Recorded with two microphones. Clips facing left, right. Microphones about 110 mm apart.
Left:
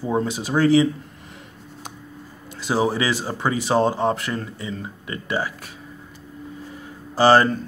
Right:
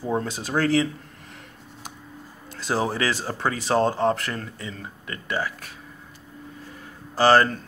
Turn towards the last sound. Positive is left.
turn(degrees=15)  # may be behind; listen again after turning